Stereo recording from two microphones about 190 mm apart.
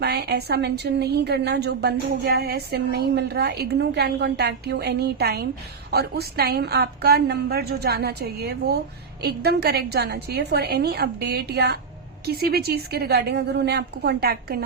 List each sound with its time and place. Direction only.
0.0 s a woman's voice: 60° right (ahead or behind)